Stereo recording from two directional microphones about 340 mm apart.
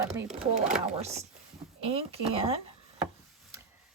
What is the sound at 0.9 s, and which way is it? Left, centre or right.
Speech, centre.